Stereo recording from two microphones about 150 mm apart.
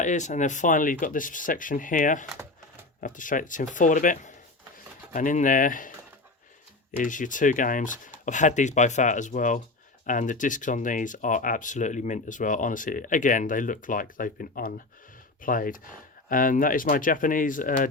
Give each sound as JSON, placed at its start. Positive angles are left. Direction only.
{"t": 0.0, "sound": "speech", "side_deg": 55}
{"t": 7.0, "sound": "speech", "side_deg": 60}